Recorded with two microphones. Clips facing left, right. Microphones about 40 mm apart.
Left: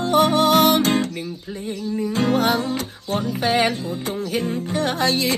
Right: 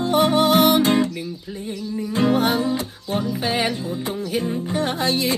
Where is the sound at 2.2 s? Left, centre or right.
Left.